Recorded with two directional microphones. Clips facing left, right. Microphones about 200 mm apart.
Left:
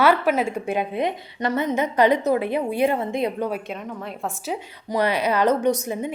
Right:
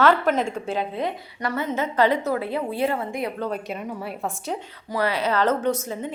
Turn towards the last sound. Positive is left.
turn(degrees=15)  # may be behind; listen again after turning